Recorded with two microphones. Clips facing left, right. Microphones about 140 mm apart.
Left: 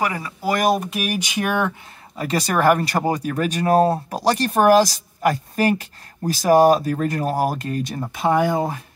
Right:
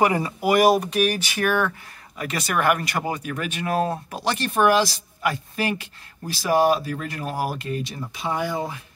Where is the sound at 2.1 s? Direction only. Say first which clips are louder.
Left 4 dB; 35° left (ahead or behind).